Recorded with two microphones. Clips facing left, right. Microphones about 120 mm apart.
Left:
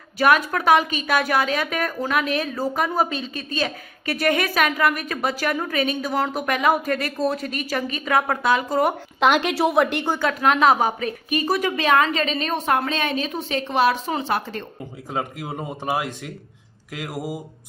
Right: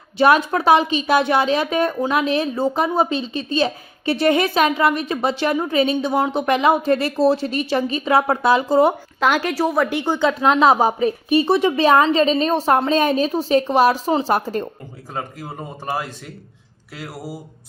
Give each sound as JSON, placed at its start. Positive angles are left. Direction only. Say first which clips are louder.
{"t": 0.2, "sound": "a woman's voice", "louder": "right 3 dB", "side_deg": -30}
{"t": 9.2, "sound": "a woman's voice", "louder": "even", "side_deg": 0}
{"t": 9.9, "sound": "speech", "louder": "right 4 dB", "side_deg": -15}
{"t": 15.1, "sound": "speech", "louder": "left 2 dB", "side_deg": 15}